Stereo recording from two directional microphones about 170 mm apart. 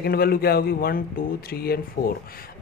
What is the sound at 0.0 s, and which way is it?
Speech, 65° left (ahead or behind).